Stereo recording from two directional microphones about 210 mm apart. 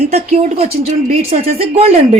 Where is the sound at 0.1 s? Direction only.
30° right (ahead or behind).